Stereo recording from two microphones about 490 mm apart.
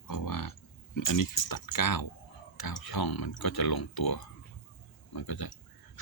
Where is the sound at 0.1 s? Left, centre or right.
Left.